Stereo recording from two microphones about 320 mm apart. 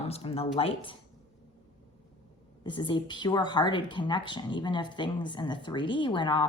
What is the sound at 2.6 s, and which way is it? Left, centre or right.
A woman's voice, centre.